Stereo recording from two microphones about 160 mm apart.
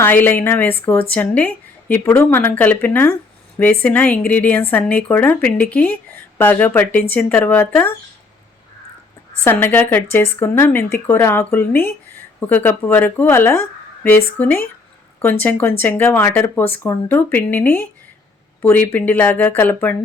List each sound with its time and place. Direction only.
0.0 s speech: 10° left (ahead or behind)
9.4 s speech: 10° left (ahead or behind)